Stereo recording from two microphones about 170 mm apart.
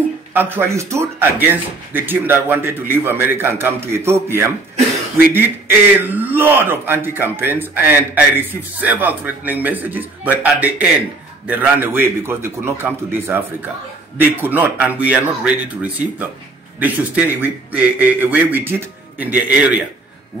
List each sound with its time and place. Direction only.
0.3 s a man's voice: 15° right (ahead or behind)